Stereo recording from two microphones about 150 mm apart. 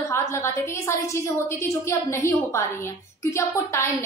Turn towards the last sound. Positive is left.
turn(degrees=20)  # may be behind; listen again after turning